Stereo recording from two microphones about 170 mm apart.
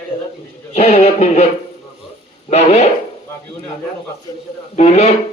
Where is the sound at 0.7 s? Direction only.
40° left (ahead or behind).